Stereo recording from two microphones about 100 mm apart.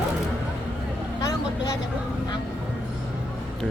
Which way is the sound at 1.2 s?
35° left (ahead or behind).